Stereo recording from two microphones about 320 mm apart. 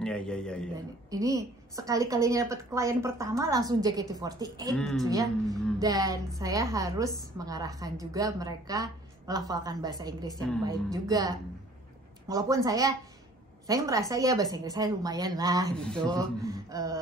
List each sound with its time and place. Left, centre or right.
0.0 s a man's voice: centre
1.1 s a woman's voice: centre
4.7 s a man's voice: centre
5.0 s a woman's voice: centre
15.7 s a man's voice: centre
16.2 s a woman's voice: centre